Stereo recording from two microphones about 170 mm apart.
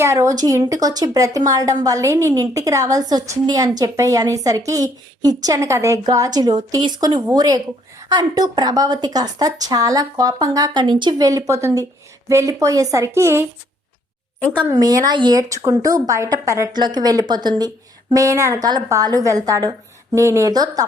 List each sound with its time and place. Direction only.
0.0 s a woman's voice: 15° right (ahead or behind)
14.7 s a woman's voice: 20° right (ahead or behind)